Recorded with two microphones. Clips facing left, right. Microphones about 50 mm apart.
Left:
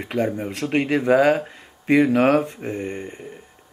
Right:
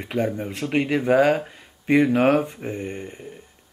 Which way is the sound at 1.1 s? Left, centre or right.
Centre.